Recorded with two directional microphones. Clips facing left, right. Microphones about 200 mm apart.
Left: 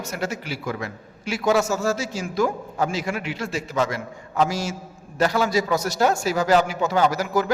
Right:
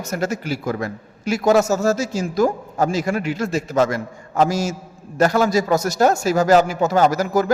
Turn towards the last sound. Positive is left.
turn(degrees=-45)  # may be behind; listen again after turning